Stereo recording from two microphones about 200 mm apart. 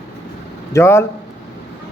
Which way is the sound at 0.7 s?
15° left (ahead or behind).